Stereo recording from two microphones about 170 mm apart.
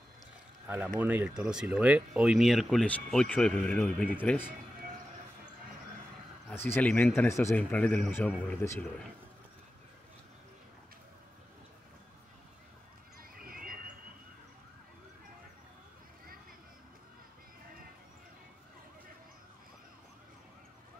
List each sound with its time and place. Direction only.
0.9 s speech: 10° right (ahead or behind); by 4.5 s 10° left (ahead or behind)
6.5 s speech: 10° left (ahead or behind)
13.2 s horse: 60° right (ahead or behind)